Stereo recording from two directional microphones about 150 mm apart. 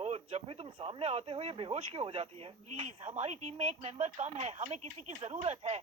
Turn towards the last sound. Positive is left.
turn(degrees=-45)  # may be behind; listen again after turning